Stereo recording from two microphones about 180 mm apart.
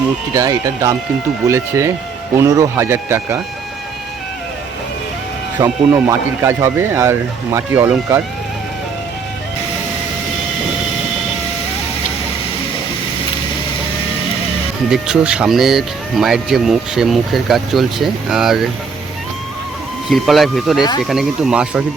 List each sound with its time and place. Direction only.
0.3 s speech: 20° right (ahead or behind)
5.5 s speech: 15° right (ahead or behind)
14.8 s speech: 5° right (ahead or behind)
20.1 s speech: centre (ahead or behind)